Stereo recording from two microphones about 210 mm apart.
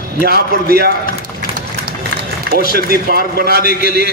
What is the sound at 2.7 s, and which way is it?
A man's voice, 45° right (ahead or behind).